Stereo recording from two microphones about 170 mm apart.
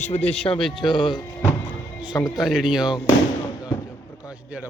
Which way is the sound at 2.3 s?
Centre (ahead or behind).